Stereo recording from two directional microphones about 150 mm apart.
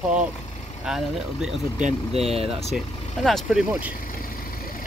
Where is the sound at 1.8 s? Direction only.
40° right (ahead or behind).